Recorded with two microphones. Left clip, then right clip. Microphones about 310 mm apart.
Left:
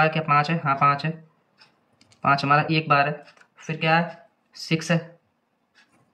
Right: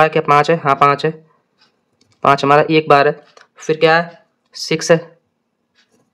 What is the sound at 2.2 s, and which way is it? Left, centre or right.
Speech, centre.